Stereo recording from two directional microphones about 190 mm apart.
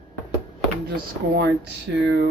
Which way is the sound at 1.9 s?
70° right (ahead or behind).